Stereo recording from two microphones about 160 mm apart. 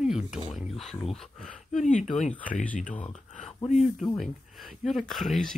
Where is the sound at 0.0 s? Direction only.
5° right (ahead or behind).